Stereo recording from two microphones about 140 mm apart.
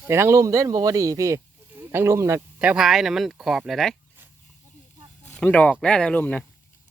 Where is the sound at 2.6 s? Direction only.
5° right (ahead or behind).